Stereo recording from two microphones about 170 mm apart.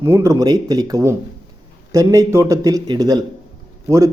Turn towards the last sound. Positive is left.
turn(degrees=-20)  # may be behind; listen again after turning